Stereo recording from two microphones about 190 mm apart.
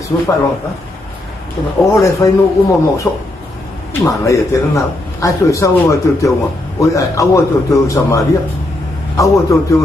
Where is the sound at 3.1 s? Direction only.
20° left (ahead or behind).